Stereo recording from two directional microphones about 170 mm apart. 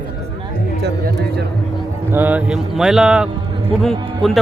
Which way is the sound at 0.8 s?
75° right (ahead or behind).